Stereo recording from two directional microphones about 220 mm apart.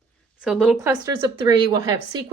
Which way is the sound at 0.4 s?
5° right (ahead or behind).